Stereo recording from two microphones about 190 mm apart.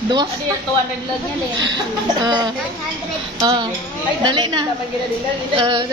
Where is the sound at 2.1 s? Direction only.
25° right (ahead or behind).